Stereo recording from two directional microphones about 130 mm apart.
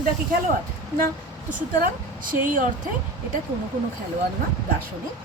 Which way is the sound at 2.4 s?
90° right.